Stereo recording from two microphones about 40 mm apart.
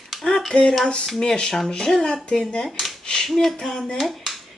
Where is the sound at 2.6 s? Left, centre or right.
Centre.